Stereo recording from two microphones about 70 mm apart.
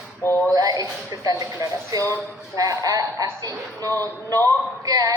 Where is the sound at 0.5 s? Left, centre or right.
Right.